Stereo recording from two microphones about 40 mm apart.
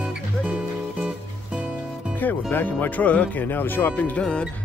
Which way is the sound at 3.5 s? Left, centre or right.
Left.